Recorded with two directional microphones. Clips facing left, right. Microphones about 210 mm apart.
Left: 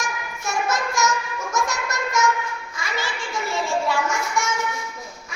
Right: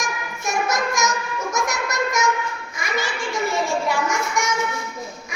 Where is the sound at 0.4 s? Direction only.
15° right (ahead or behind).